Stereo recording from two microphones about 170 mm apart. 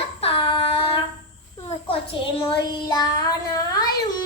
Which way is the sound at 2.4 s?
30° left (ahead or behind).